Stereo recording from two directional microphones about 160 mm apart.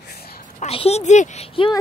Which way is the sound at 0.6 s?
40° left (ahead or behind).